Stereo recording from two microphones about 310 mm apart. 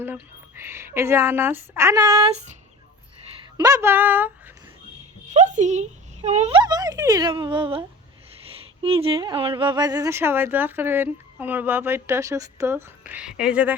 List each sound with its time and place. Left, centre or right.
0.0 s speech: centre
3.6 s speech: centre
5.3 s speech: right; by 13.7 s centre